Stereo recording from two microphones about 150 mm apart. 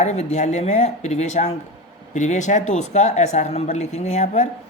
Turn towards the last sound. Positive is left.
turn(degrees=50)  # may be behind; listen again after turning